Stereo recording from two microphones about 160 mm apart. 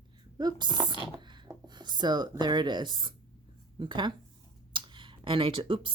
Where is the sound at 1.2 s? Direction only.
30° right (ahead or behind).